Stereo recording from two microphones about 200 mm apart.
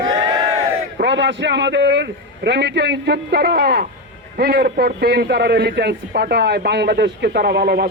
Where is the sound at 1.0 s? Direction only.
65° right (ahead or behind).